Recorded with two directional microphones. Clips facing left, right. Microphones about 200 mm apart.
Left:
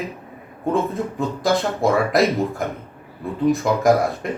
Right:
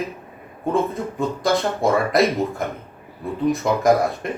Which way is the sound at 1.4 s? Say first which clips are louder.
Left 1 dB; centre (ahead or behind).